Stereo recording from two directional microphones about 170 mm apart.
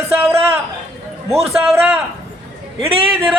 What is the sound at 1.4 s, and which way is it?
Speech, centre (ahead or behind).